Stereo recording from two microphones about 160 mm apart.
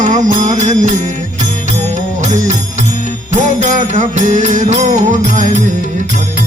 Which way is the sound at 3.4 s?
55° right (ahead or behind).